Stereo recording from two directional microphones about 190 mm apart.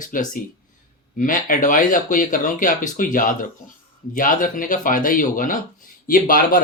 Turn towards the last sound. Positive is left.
turn(degrees=45)  # may be behind; listen again after turning